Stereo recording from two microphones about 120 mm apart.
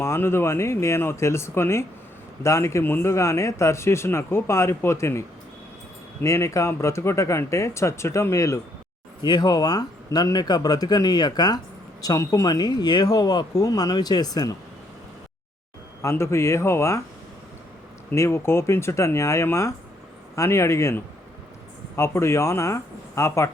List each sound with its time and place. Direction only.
0.0 s speech: 20° left (ahead or behind)
6.2 s speech: 25° left (ahead or behind)
16.0 s speech: 20° left (ahead or behind)
18.1 s speech: 20° left (ahead or behind)